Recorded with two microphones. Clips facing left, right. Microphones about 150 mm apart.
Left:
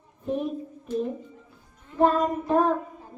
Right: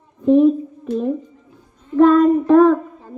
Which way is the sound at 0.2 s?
90° right.